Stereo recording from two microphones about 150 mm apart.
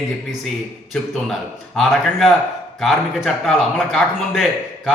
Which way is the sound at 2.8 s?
Centre (ahead or behind).